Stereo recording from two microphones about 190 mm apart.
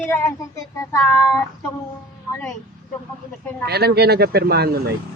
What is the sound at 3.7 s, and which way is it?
Speech, 60° right (ahead or behind).